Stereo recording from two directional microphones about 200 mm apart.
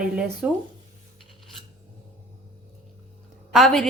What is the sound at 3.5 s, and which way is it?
Speech, centre (ahead or behind).